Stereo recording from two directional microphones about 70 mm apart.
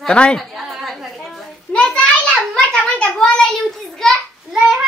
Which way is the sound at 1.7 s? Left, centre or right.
Centre.